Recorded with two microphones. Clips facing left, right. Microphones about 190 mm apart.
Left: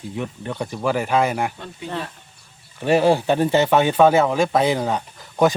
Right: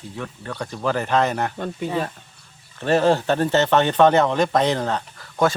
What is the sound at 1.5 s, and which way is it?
Speech, 50° right (ahead or behind).